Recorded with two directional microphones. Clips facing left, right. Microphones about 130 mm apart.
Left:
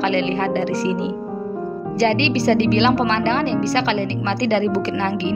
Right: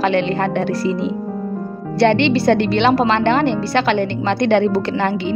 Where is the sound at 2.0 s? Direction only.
50° right (ahead or behind).